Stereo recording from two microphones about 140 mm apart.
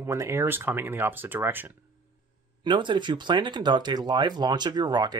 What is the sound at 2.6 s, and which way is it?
Speech, 35° right (ahead or behind).